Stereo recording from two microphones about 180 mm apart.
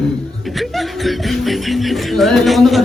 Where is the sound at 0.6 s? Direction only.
Centre (ahead or behind).